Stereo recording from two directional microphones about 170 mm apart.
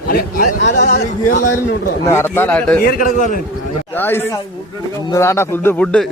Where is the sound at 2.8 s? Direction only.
60° left (ahead or behind).